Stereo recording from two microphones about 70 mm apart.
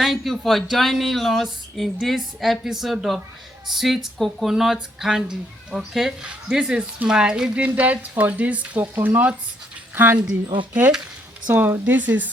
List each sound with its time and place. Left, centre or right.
0.0 s a woman's voice: centre
7.6 s frying: right
11.4 s frying: right